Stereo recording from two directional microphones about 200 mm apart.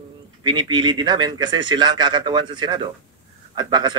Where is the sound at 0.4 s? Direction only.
25° right (ahead or behind).